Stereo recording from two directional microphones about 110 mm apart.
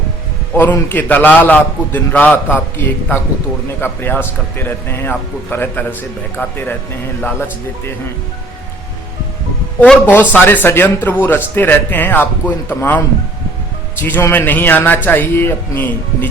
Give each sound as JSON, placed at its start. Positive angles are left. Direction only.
{"t": 0.5, "sound": "speech", "side_deg": 20}
{"t": 9.8, "sound": "speech", "side_deg": 15}
{"t": 14.0, "sound": "speech", "side_deg": 20}